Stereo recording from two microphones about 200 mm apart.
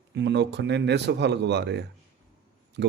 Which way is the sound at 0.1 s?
60° right (ahead or behind).